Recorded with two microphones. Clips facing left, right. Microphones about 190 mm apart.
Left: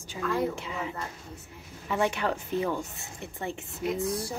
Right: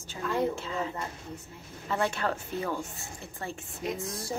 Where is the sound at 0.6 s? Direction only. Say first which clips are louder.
Right 1 dB; 15° left (ahead or behind).